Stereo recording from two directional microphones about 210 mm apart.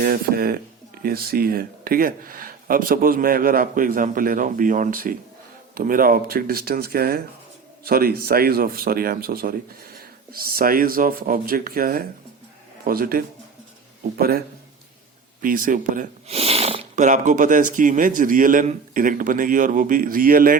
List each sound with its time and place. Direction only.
0.0 s speech: 45° right (ahead or behind)